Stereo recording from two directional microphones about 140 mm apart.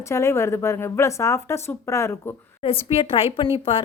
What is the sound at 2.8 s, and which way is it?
Speech, 45° left (ahead or behind).